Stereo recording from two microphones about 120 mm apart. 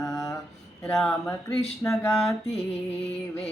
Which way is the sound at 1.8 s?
25° left (ahead or behind).